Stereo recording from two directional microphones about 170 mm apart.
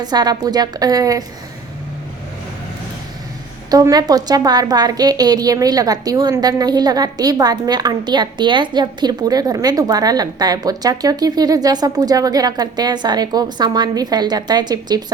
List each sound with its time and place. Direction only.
0.0 s a woman's voice: 25° right (ahead or behind)
3.7 s a woman's voice: 20° right (ahead or behind)